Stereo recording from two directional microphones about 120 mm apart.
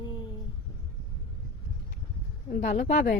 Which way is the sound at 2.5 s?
70° left (ahead or behind).